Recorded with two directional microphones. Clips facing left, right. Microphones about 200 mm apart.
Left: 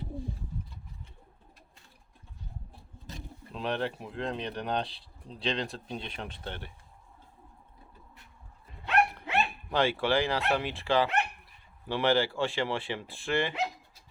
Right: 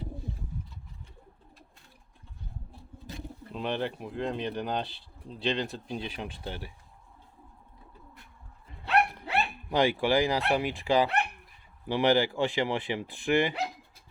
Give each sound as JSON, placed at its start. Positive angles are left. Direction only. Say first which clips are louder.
{"t": 3.5, "sound": "speech", "louder": "even", "side_deg": 0}
{"t": 8.8, "sound": "dog", "louder": "right 1 dB", "side_deg": -35}
{"t": 9.6, "sound": "speech", "louder": "right 3 dB", "side_deg": -15}